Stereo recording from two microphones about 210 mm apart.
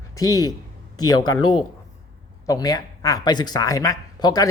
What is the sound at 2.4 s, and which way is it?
A man's voice, 15° left (ahead or behind).